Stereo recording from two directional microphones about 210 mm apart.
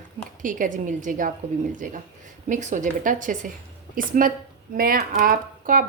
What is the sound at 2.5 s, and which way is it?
A woman's voice, 35° right (ahead or behind).